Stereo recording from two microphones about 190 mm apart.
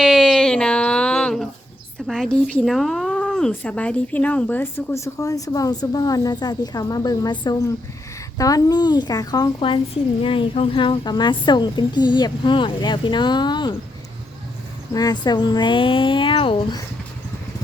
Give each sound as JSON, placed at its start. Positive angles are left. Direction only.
{"t": 0.0, "sound": "a sound", "side_deg": 0}
{"t": 2.0, "sound": "a woman's voice", "side_deg": 0}
{"t": 14.9, "sound": "a woman's voice", "side_deg": 20}